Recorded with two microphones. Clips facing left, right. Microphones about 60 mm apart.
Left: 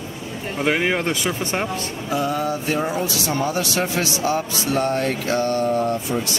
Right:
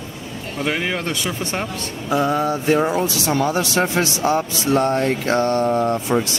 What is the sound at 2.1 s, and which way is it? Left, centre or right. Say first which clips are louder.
Speech: right 4 dB; right.